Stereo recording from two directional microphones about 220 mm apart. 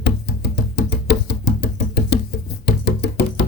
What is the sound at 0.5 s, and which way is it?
Music, 50° left (ahead or behind).